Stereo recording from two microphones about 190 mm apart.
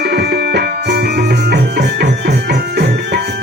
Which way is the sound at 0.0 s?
60° right (ahead or behind).